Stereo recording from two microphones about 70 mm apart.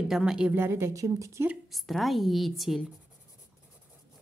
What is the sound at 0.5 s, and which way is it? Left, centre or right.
Speech, right.